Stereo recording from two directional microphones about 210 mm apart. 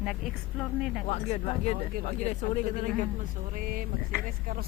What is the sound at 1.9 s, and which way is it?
Speech, 45° right (ahead or behind).